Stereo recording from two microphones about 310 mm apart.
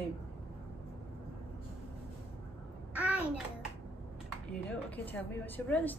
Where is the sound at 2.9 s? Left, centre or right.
Centre.